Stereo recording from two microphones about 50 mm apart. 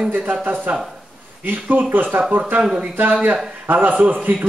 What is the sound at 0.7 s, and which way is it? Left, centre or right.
A man's voice, right.